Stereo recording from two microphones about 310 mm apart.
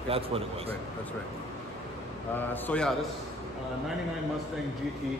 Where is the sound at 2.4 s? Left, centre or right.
Centre.